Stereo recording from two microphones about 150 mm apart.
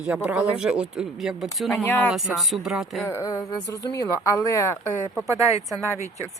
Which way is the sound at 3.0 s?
15° left (ahead or behind).